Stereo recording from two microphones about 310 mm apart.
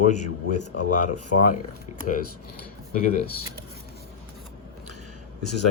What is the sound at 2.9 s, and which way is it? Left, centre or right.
Speech, left.